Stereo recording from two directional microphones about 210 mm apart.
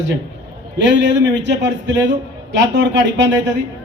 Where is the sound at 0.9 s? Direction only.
60° right (ahead or behind).